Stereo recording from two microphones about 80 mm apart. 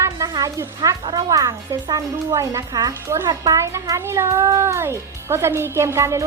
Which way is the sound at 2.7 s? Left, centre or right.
Right.